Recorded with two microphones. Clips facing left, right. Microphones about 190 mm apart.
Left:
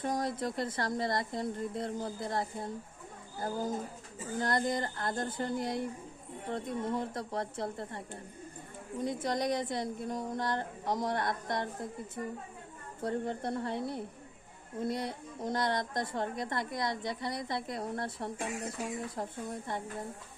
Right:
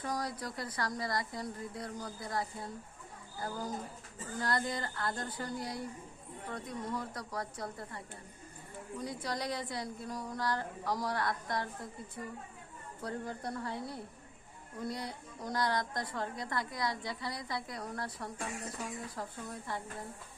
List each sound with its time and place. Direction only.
0.0 s a woman's voice: 25° left (ahead or behind)